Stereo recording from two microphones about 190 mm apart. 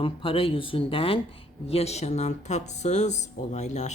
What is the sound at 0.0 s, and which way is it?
Speech, 30° left (ahead or behind).